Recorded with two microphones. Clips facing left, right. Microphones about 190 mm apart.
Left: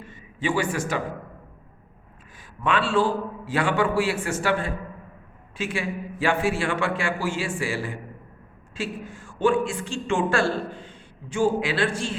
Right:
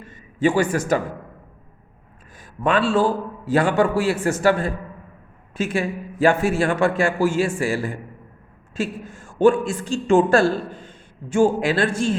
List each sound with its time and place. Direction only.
0.0 s a man's voice: 45° right (ahead or behind)
2.6 s a man's voice: 40° right (ahead or behind)